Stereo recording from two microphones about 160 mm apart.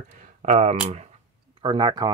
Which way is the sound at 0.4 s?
45° right (ahead or behind).